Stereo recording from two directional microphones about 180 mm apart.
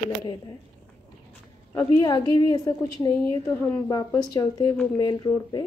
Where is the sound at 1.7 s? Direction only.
20° left (ahead or behind).